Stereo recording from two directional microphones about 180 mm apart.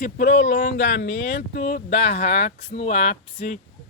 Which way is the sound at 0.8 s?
90° left.